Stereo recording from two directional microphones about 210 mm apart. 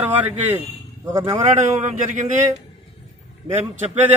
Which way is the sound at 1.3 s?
35° right (ahead or behind).